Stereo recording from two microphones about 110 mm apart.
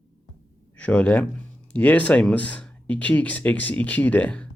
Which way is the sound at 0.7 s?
10° left (ahead or behind).